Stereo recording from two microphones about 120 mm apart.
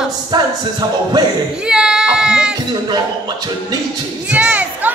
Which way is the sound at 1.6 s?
5° right (ahead or behind).